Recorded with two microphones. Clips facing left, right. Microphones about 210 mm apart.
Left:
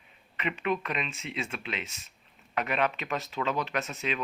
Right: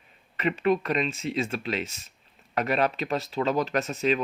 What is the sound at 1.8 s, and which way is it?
Speech, centre (ahead or behind).